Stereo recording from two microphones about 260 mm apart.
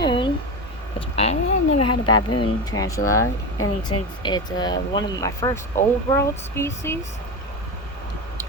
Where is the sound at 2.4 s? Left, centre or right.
Centre.